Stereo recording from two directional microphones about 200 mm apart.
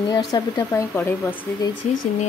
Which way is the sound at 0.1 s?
20° left (ahead or behind).